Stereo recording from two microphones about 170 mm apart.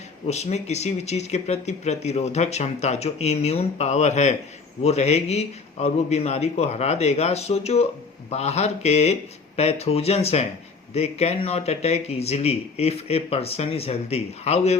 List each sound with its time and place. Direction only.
0.3 s speech: 40° left (ahead or behind)